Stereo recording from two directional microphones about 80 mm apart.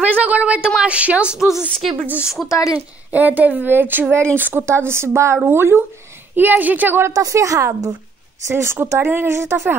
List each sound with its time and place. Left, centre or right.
0.0 s a woman's voice: centre
3.1 s speech: right
7.0 s a woman's voice: right